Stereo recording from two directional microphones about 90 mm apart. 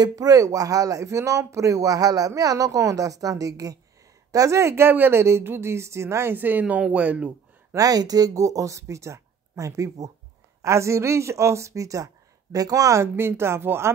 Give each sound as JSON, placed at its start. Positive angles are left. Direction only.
{"t": 0.0, "sound": "speech", "side_deg": -45}
{"t": 7.7, "sound": "speech", "side_deg": -45}